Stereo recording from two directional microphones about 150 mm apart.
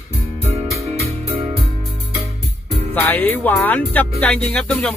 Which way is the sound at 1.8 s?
45° right (ahead or behind).